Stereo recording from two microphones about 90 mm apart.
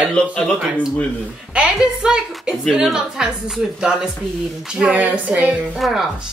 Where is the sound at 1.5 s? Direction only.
10° right (ahead or behind).